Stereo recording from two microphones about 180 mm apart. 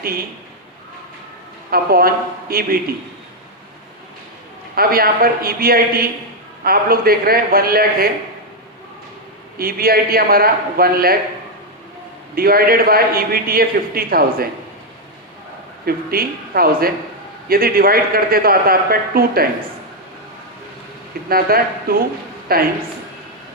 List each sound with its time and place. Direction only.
1.7 s a man's voice: 55° right (ahead or behind)
4.7 s a man's voice: 55° right (ahead or behind)
9.6 s a man's voice: 55° right (ahead or behind)
12.3 s a man's voice: 55° right (ahead or behind)
15.9 s a man's voice: 55° right (ahead or behind)
21.2 s a man's voice: 55° right (ahead or behind)